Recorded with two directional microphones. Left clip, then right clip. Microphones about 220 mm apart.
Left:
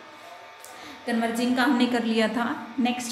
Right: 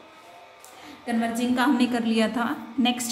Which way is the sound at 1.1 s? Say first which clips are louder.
Even; 10° right (ahead or behind).